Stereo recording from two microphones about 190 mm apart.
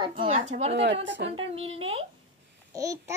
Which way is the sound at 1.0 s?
70° right (ahead or behind).